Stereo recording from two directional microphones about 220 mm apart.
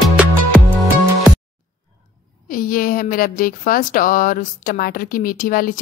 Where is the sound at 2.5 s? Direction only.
40° left (ahead or behind).